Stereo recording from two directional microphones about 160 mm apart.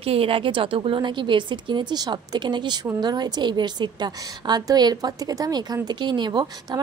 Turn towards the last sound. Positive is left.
turn(degrees=-25)  # may be behind; listen again after turning